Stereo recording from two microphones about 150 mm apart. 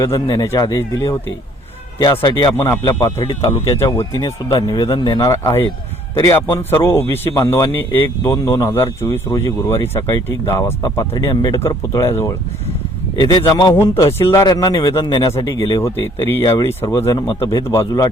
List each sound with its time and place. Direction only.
0.0 s speech: 20° left (ahead or behind)
2.0 s a man's voice: 30° left (ahead or behind)
13.1 s speech: 30° left (ahead or behind)
13.7 s a man's voice: 20° left (ahead or behind)